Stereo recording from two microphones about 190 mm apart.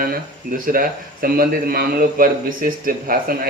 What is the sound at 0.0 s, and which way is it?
Speech, 45° right (ahead or behind).